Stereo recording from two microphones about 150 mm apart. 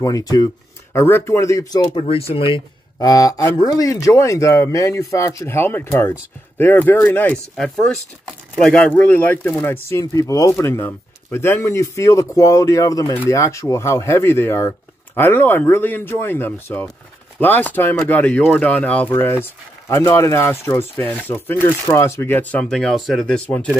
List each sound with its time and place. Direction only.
0.0 s speech: 25° left (ahead or behind)
2.0 s speech: 40° left (ahead or behind)
3.0 s speech: 25° left (ahead or behind); by 23.7 s 10° left (ahead or behind)